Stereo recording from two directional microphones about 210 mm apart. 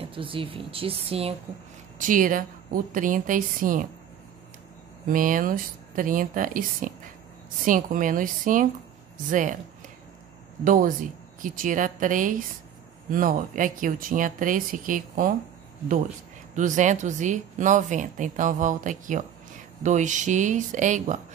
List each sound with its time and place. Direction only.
0.0 s speech: 25° right (ahead or behind)
2.0 s speech: 40° right (ahead or behind)
5.0 s speech: 40° right (ahead or behind)
10.6 s speech: 40° right (ahead or behind)
16.5 s speech: 35° right (ahead or behind)